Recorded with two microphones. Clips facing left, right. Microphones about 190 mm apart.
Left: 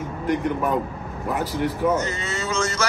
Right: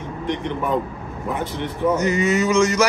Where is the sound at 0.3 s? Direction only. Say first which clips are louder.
Left 1 dB; 5° left (ahead or behind).